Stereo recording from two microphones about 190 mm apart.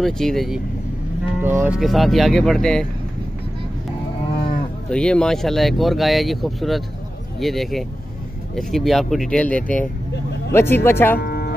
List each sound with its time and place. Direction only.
0.0 s speech: centre (ahead or behind)
1.4 s speech: 10° right (ahead or behind)
4.8 s speech: 5° left (ahead or behind)
11.1 s music: 55° left (ahead or behind)